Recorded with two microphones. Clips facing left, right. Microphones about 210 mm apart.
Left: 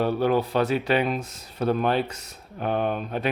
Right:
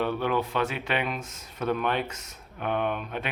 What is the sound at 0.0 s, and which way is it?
Speech, 40° left (ahead or behind).